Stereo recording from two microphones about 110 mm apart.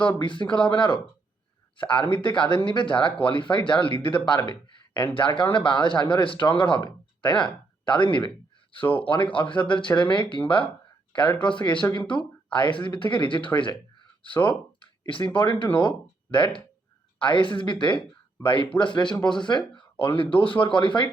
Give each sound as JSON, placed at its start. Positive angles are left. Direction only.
{"t": 0.2, "sound": "speech", "side_deg": 45}
{"t": 14.4, "sound": "a sound", "side_deg": 50}
{"t": 15.2, "sound": "speech", "side_deg": 45}